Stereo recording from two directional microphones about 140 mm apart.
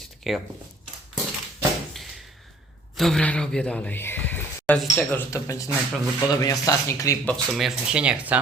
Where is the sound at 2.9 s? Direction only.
5° left (ahead or behind).